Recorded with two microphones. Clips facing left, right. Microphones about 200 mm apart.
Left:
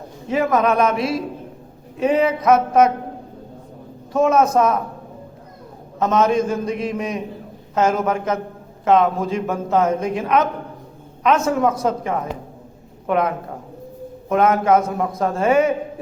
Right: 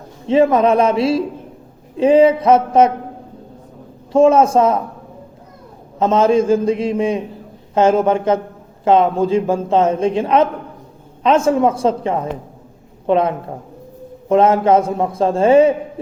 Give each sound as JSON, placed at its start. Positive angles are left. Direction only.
{"t": 0.3, "sound": "a man's voice", "side_deg": -30}
{"t": 4.1, "sound": "a man's voice", "side_deg": -30}
{"t": 6.0, "sound": "a man's voice", "side_deg": -30}